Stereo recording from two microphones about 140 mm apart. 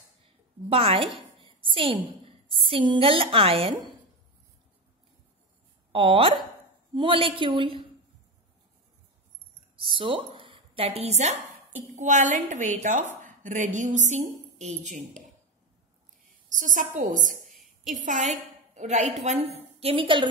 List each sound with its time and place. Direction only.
0.7 s a woman's voice: 40° right (ahead or behind)
1.4 s a sound: 35° right (ahead or behind)
2.2 s a woman's voice: 40° right (ahead or behind)
5.9 s a woman's voice: 40° right (ahead or behind)
9.8 s a woman's voice: 40° right (ahead or behind); by 15.2 s 60° right (ahead or behind)
16.4 s a woman's voice: 65° right (ahead or behind)
17.5 s a sound: centre (ahead or behind)
18.0 s a woman's voice: 60° right (ahead or behind); by 20.2 s 40° right (ahead or behind)